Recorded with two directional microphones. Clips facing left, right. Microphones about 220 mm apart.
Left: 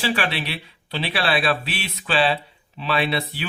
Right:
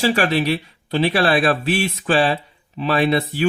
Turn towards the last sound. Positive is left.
turn(degrees=-45)  # may be behind; listen again after turning